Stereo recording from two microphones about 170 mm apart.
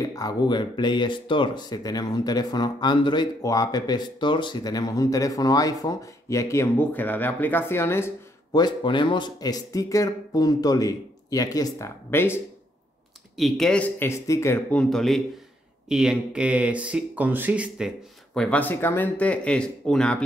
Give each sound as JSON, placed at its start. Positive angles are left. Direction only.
{"t": 0.0, "sound": "speech", "side_deg": 20}
{"t": 8.5, "sound": "speech", "side_deg": 25}
{"t": 13.4, "sound": "speech", "side_deg": 0}